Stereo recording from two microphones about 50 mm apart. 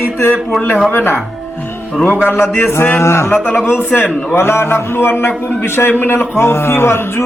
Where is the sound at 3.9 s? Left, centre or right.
Left.